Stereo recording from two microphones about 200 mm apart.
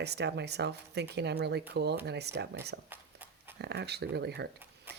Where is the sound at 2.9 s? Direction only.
10° right (ahead or behind).